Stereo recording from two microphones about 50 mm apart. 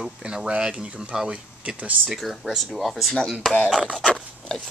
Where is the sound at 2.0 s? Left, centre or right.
Centre.